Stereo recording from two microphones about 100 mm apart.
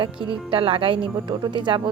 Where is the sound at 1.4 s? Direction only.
50° right (ahead or behind).